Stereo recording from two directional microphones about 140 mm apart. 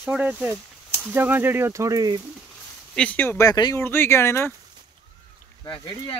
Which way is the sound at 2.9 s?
10° left (ahead or behind).